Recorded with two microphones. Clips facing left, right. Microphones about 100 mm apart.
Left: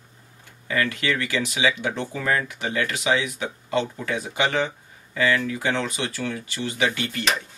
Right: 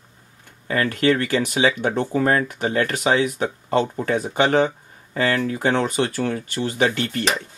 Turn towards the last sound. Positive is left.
turn(degrees=-45)  # may be behind; listen again after turning